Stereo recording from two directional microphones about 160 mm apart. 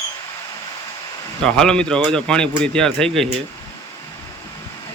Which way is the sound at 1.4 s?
5° left (ahead or behind).